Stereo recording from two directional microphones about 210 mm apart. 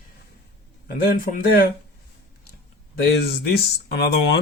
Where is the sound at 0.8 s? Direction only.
45° left (ahead or behind).